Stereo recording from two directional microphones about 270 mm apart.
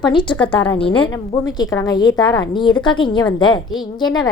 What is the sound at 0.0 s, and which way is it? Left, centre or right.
A woman's voice, centre.